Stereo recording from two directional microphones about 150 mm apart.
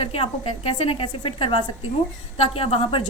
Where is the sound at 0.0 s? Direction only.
40° left (ahead or behind).